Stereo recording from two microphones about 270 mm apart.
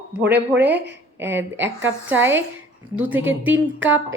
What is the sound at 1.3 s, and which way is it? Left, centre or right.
Speech, right.